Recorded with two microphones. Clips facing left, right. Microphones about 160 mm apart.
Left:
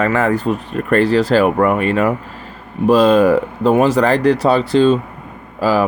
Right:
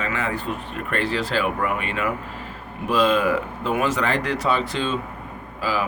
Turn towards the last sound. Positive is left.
turn(degrees=40)  # may be behind; listen again after turning